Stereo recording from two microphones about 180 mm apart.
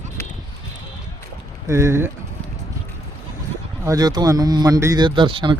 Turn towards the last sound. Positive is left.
turn(degrees=-25)  # may be behind; listen again after turning